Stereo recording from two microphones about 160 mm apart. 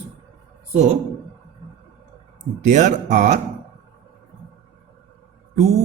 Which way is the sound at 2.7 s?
50° right (ahead or behind).